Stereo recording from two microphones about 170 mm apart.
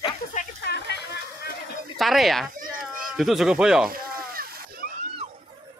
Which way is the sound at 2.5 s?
55° right (ahead or behind).